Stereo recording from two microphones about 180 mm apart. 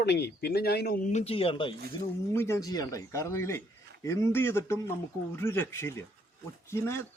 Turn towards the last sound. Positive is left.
turn(degrees=15)  # may be behind; listen again after turning